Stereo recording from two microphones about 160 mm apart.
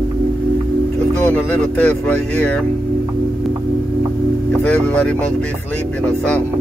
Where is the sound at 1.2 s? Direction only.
10° left (ahead or behind).